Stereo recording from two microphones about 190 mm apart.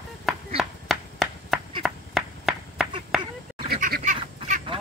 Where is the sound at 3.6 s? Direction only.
55° right (ahead or behind).